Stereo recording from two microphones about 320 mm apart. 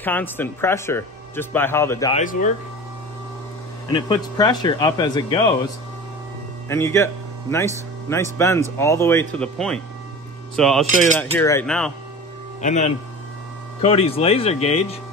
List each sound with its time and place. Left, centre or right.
0.0 s speech: centre
3.9 s speech: centre
6.7 s speech: centre
12.6 s speech: left